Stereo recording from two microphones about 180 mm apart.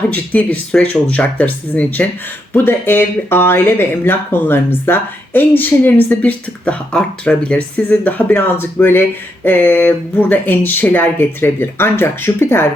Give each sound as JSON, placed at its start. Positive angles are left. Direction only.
{"t": 0.1, "sound": "speech", "side_deg": 10}